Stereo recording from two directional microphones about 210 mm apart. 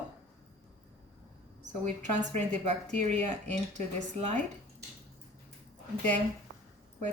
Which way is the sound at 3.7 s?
35° right (ahead or behind).